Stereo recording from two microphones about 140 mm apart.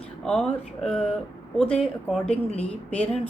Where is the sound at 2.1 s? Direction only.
5° left (ahead or behind).